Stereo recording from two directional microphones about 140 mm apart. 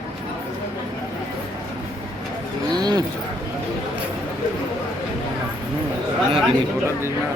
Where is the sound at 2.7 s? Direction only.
30° right (ahead or behind).